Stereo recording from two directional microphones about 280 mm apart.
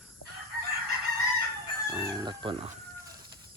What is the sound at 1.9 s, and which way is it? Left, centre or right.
Chicken, centre.